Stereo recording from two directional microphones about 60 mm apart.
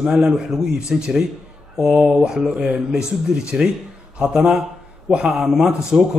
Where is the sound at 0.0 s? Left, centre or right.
Centre.